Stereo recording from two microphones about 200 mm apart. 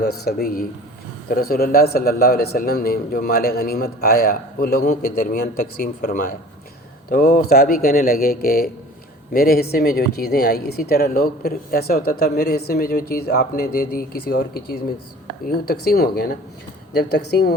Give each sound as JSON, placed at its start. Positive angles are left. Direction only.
{"t": 0.3, "sound": "a man's voice", "side_deg": 50}